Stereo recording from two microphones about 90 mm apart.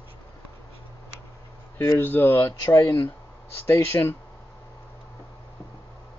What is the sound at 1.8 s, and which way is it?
Speech, 25° left (ahead or behind).